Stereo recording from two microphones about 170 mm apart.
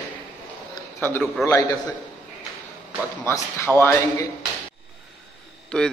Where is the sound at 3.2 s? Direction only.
15° left (ahead or behind).